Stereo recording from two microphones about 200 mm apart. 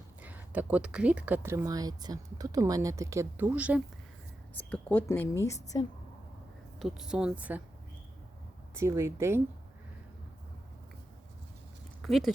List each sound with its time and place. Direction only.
0.2 s speech: 10° right (ahead or behind)
4.5 s a woman's voice: 10° left (ahead or behind)
5.7 s a woman's voice: 20° left (ahead or behind)
6.7 s speech: centre (ahead or behind)
8.7 s speech: 15° right (ahead or behind)
12.0 s speech: centre (ahead or behind)